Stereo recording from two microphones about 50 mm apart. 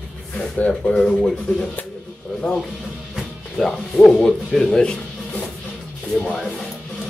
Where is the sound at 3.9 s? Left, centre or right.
Left.